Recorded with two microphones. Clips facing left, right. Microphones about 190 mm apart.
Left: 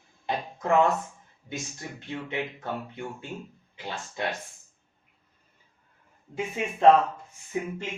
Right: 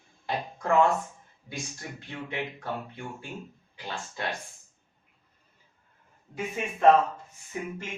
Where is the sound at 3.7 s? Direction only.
20° left (ahead or behind).